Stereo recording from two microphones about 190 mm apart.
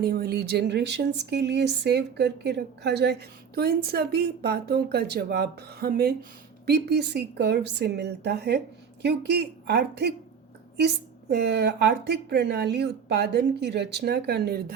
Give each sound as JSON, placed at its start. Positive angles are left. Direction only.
{"t": 0.0, "sound": "speech", "side_deg": -50}